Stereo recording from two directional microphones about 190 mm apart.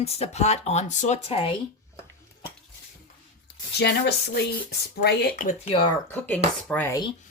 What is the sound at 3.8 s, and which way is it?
A woman's voice, 60° left (ahead or behind).